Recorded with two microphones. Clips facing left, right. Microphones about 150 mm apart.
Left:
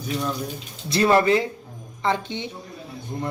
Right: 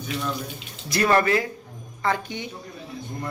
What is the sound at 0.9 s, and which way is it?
Speech, 25° left (ahead or behind).